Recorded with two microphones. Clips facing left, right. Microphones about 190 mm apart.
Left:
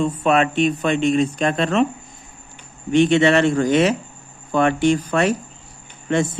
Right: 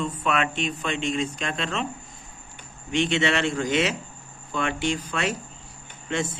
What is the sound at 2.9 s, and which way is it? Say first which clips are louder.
Speech: left 9 dB; 45° left (ahead or behind).